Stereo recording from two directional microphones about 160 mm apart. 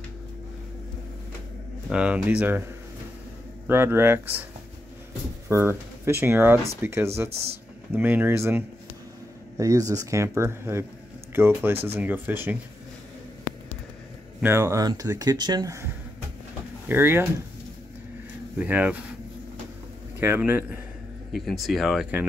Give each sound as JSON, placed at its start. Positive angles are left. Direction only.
{"t": 1.9, "sound": "speech", "side_deg": -5}
{"t": 3.6, "sound": "speech", "side_deg": -15}
{"t": 5.5, "sound": "speech", "side_deg": -15}
{"t": 14.4, "sound": "speech", "side_deg": -15}
{"t": 18.6, "sound": "speech", "side_deg": -10}
{"t": 20.2, "sound": "speech", "side_deg": -15}
{"t": 21.3, "sound": "speech", "side_deg": 0}